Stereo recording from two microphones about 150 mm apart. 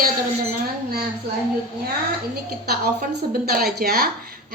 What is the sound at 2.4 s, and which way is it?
A woman's voice, 90° right.